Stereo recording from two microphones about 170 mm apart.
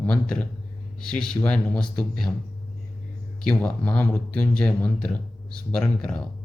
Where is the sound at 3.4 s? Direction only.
10° left (ahead or behind).